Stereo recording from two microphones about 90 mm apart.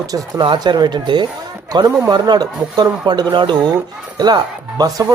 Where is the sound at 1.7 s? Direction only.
45° right (ahead or behind).